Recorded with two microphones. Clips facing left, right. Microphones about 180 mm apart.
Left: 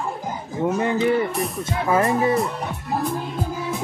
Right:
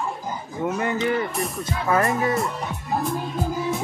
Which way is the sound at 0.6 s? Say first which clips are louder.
Left 4 dB; 25° left (ahead or behind).